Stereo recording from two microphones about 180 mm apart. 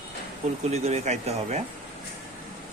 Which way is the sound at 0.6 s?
35° right (ahead or behind).